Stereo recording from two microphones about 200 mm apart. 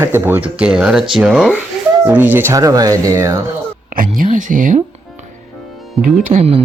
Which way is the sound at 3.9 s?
45° right (ahead or behind).